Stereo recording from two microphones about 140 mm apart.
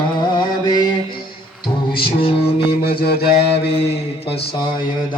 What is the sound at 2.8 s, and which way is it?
Mantra, 90° left.